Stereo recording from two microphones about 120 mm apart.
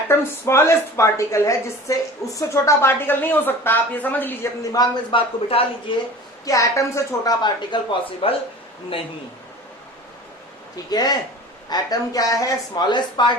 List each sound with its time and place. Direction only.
0.1 s a woman's voice: 25° left (ahead or behind)
4.6 s speech: 30° left (ahead or behind)
5.1 s speech: 55° left (ahead or behind)
6.4 s a woman's voice: 30° left (ahead or behind)
8.2 s speech: 50° left (ahead or behind)
10.9 s speech: 35° left (ahead or behind)